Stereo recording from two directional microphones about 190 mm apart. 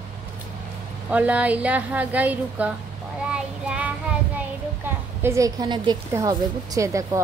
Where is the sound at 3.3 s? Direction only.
5° right (ahead or behind).